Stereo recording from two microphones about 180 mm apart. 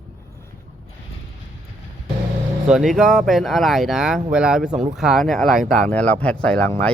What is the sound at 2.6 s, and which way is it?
Speech, 5° right (ahead or behind).